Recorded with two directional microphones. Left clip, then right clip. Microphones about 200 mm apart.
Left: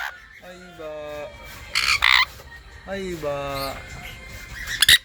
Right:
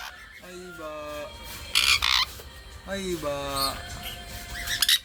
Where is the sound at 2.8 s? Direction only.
Centre (ahead or behind).